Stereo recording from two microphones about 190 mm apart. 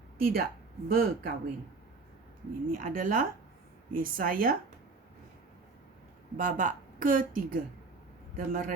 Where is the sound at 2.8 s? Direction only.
45° right (ahead or behind).